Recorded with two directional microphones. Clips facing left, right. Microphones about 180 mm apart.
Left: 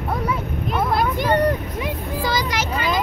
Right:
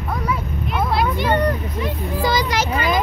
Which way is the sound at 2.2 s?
20° right (ahead or behind).